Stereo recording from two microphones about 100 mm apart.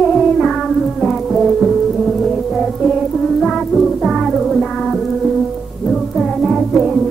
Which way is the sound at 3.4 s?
Centre (ahead or behind).